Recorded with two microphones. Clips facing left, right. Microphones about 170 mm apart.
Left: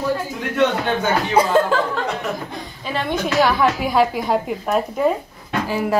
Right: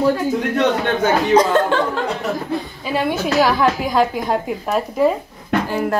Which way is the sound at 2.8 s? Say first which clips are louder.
Right 1 dB; 10° right (ahead or behind).